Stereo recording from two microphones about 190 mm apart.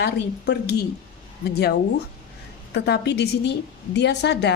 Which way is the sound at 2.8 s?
60° left (ahead or behind).